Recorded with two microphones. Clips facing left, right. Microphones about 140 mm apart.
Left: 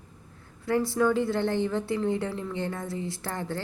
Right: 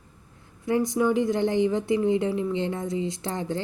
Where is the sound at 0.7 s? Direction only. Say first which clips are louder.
Right 1 dB; 15° right (ahead or behind).